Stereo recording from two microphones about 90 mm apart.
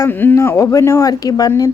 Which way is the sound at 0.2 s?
25° left (ahead or behind).